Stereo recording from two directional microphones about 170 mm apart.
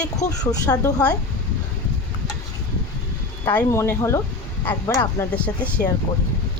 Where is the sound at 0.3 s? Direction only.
20° left (ahead or behind).